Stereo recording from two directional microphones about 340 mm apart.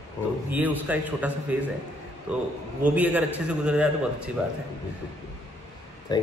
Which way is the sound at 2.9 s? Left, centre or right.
Centre.